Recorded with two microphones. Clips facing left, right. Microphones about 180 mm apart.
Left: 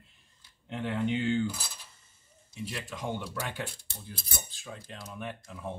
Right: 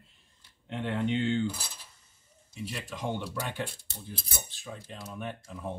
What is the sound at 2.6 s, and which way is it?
Speech, centre (ahead or behind).